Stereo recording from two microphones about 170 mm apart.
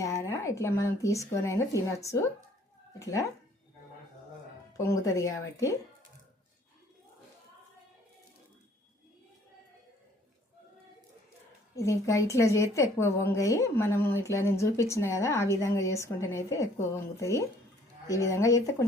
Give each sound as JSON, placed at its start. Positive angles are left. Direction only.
{"t": 0.0, "sound": "a woman's voice", "side_deg": 20}
{"t": 4.8, "sound": "a woman's voice", "side_deg": 15}
{"t": 11.7, "sound": "a woman's voice", "side_deg": 20}